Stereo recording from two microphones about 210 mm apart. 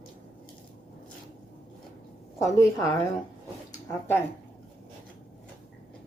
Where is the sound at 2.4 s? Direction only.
15° left (ahead or behind).